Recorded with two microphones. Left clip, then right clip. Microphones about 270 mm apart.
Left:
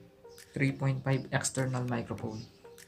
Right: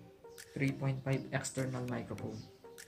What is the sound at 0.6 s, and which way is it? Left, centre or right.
Speech, left.